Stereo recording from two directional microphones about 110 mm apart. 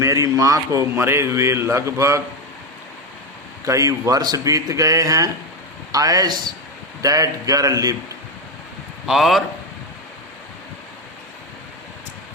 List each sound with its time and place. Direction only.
0.0 s a man's voice: 30° right (ahead or behind)
3.7 s speech: 30° right (ahead or behind)
9.0 s a man's voice: centre (ahead or behind)